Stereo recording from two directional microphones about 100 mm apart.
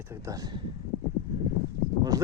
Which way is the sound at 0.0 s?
30° right (ahead or behind).